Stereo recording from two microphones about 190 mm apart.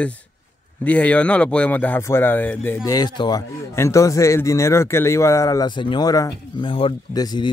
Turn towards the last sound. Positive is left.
turn(degrees=20)  # may be behind; listen again after turning